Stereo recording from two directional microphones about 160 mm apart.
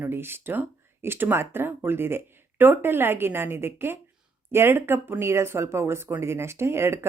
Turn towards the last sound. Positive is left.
turn(degrees=-15)  # may be behind; listen again after turning